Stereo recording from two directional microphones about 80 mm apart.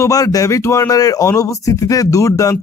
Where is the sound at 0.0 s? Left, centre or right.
Left.